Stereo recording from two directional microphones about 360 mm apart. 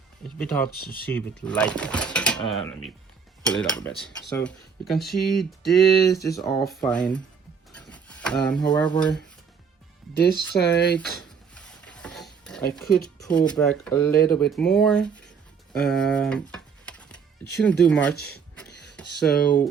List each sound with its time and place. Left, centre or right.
0.3 s speech: centre
10.6 s speech: left
10.9 s rub: centre
12.7 s speech: centre
15.7 s typing: centre
17.6 s speech: centre
18.7 s a sound: left
19.3 s speech: centre